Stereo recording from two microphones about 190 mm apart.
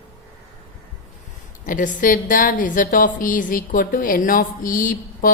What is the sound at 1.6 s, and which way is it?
A woman's voice, 45° left (ahead or behind).